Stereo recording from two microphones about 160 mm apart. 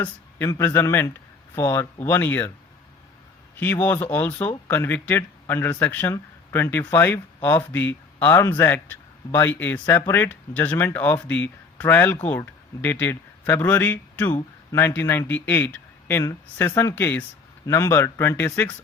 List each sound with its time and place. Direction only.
0.0 s speech: 15° left (ahead or behind)
3.6 s speech: 10° left (ahead or behind)